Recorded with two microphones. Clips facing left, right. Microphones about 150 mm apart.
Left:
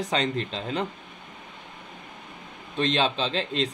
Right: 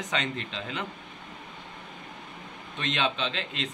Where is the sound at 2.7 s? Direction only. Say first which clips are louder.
Left 5 dB; 35° left (ahead or behind).